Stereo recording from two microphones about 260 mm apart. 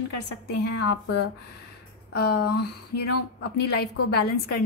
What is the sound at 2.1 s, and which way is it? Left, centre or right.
Speech, left.